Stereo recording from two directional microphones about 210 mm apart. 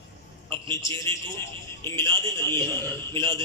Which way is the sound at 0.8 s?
15° left (ahead or behind).